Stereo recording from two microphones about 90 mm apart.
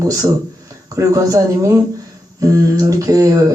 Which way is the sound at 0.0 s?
45° right (ahead or behind).